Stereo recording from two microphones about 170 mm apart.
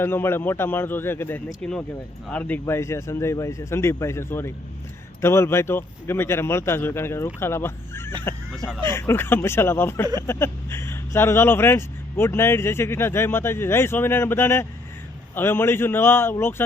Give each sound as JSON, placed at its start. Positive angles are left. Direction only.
{"t": 0.0, "sound": "speech", "side_deg": 15}